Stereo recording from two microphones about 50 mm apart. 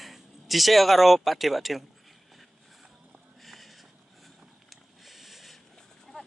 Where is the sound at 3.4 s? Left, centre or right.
Centre.